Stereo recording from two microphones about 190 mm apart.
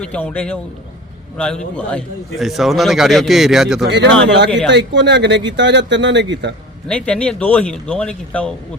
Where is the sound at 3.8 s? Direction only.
65° right (ahead or behind).